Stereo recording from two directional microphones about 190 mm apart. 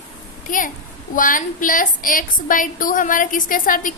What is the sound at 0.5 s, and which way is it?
A woman's voice, 45° left (ahead or behind).